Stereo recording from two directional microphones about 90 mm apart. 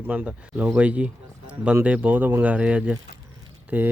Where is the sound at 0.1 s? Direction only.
20° right (ahead or behind).